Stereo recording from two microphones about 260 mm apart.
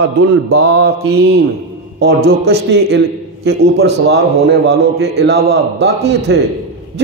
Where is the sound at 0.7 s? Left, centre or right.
Right.